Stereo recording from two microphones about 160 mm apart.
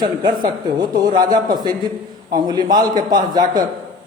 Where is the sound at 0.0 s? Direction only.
30° right (ahead or behind).